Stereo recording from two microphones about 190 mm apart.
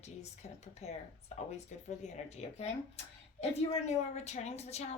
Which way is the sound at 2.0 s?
35° left (ahead or behind).